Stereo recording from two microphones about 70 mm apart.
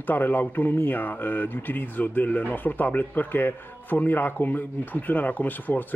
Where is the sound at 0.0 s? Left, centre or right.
Left.